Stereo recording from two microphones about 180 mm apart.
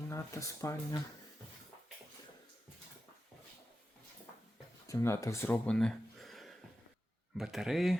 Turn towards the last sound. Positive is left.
turn(degrees=0)  # may be behind; listen again after turning